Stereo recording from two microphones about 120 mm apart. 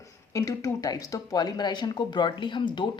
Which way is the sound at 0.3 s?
30° left (ahead or behind).